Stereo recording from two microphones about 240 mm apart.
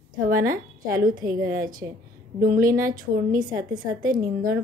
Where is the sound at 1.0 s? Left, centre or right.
Right.